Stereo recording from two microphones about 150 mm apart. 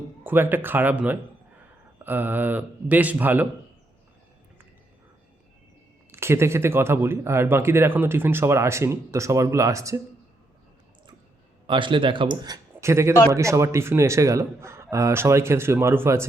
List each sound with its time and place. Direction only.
0.3 s speech: 15° right (ahead or behind)
6.1 s speech: 15° right (ahead or behind)
11.6 s a man's voice: 35° right (ahead or behind); by 16.2 s 15° right (ahead or behind)